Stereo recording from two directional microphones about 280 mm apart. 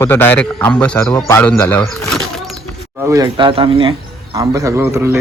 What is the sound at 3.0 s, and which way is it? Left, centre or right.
A man's voice, centre.